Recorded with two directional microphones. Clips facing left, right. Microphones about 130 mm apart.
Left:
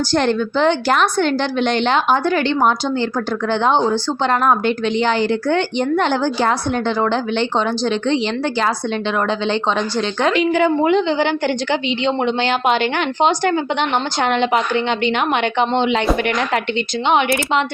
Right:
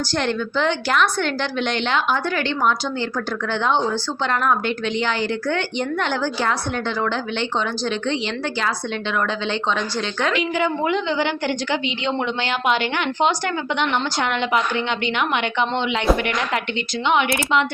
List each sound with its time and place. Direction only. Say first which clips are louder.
0.1 s a woman's voice: left 6 dB; 35° left (ahead or behind)
10.2 s a woman's voice: left 6 dB; 35° left (ahead or behind)
17.1 s speech: left 2 dB; 30° left (ahead or behind)